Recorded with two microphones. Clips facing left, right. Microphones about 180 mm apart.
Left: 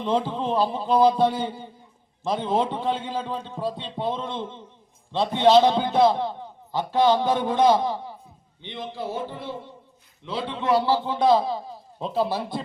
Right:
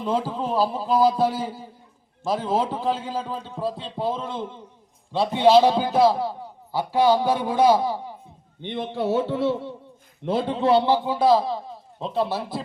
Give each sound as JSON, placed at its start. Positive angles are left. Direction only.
{"t": 0.0, "sound": "a man's voice", "side_deg": -5}
{"t": 8.6, "sound": "speech", "side_deg": -55}
{"t": 10.2, "sound": "a man's voice", "side_deg": -45}
{"t": 10.7, "sound": "a man's voice", "side_deg": -25}